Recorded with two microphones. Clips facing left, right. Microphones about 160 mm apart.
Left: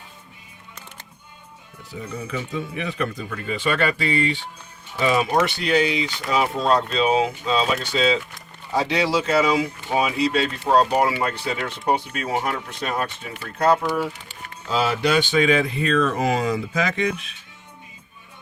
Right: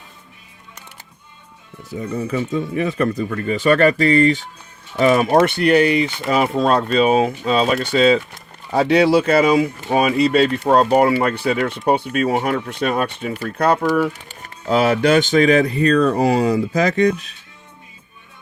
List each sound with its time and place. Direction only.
1.9 s speech: 45° right (ahead or behind); by 13.3 s 60° right (ahead or behind)
14.7 s speech: 60° right (ahead or behind); by 17.3 s 40° right (ahead or behind)